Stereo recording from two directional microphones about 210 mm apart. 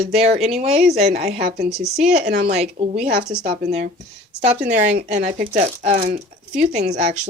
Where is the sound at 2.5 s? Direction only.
30° right (ahead or behind).